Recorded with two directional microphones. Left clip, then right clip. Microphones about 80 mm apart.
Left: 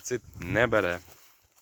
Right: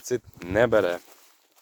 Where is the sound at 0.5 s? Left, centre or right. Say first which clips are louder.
Right 4 dB; right.